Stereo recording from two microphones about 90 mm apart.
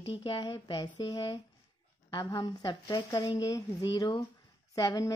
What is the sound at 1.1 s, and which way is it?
Speech, 45° left (ahead or behind).